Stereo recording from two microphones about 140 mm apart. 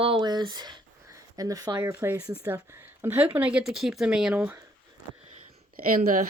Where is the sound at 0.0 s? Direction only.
35° right (ahead or behind).